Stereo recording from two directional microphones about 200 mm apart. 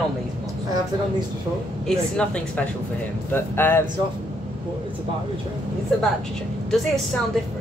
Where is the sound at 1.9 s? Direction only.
5° left (ahead or behind).